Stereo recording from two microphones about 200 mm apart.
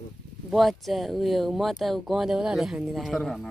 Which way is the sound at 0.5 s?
Centre (ahead or behind).